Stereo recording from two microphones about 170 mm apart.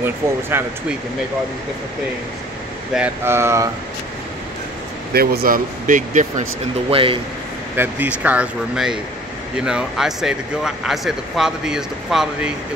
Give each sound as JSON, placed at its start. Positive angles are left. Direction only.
{"t": 0.0, "sound": "speech", "side_deg": -15}
{"t": 2.9, "sound": "speech", "side_deg": -10}
{"t": 5.1, "sound": "speech", "side_deg": -65}
{"t": 6.9, "sound": "a man's voice", "side_deg": -30}
{"t": 7.7, "sound": "speech", "side_deg": -10}